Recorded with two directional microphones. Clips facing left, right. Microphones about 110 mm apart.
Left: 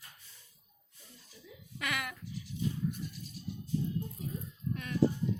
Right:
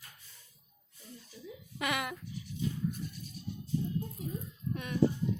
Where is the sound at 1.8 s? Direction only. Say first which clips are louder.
Right 4 dB; 20° right (ahead or behind).